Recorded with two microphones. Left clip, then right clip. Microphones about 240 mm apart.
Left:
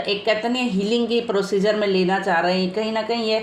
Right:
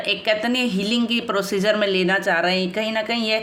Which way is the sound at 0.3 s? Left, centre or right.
Right.